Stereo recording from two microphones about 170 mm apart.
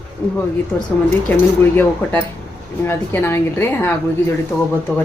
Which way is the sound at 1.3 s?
10° left (ahead or behind).